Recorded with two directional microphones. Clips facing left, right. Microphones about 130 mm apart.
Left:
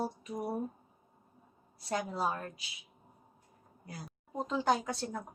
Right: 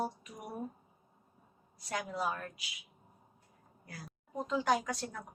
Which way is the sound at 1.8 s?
30° left (ahead or behind).